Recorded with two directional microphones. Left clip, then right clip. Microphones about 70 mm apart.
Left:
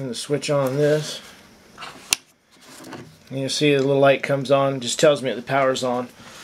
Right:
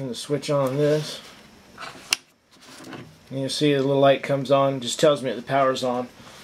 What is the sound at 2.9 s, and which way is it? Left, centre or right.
Speech, left.